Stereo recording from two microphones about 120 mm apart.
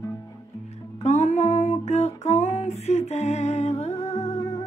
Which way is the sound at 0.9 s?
70° left (ahead or behind).